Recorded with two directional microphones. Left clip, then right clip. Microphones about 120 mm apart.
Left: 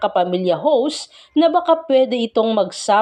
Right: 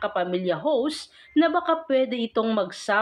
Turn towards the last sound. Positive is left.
turn(degrees=30)  # may be behind; listen again after turning